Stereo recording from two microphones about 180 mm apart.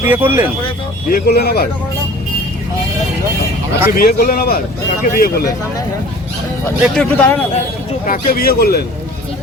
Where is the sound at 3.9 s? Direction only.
55° left (ahead or behind).